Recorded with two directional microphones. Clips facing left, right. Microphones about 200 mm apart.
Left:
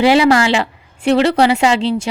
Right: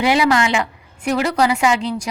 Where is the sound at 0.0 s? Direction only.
30° left (ahead or behind).